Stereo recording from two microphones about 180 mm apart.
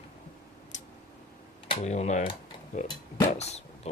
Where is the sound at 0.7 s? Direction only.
40° left (ahead or behind).